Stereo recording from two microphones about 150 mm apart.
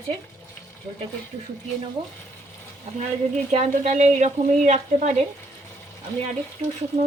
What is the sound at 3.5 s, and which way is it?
Speech, 50° right (ahead or behind).